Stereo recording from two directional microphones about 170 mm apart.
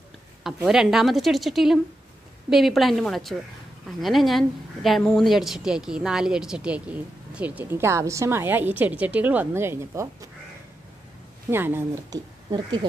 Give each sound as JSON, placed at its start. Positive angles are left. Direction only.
{"t": 0.6, "sound": "a woman's voice", "side_deg": -5}
{"t": 11.5, "sound": "a woman's voice", "side_deg": -15}
{"t": 12.4, "sound": "speech", "side_deg": -25}